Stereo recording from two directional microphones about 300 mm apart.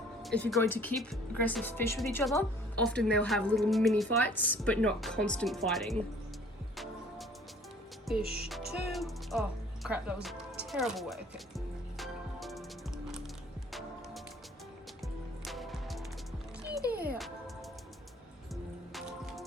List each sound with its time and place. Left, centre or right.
0.2 s speech: centre
8.2 s music: right
8.9 s music: centre
15.4 s music: centre
17.2 s music: centre